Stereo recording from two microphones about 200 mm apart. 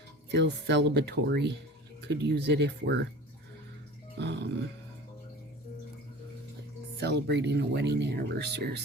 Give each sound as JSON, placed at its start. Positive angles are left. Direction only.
{"t": 0.3, "sound": "speech", "side_deg": -60}
{"t": 4.2, "sound": "speech", "side_deg": -60}
{"t": 7.0, "sound": "speech", "side_deg": -55}